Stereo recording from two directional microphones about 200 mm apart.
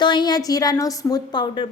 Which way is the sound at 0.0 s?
20° left (ahead or behind).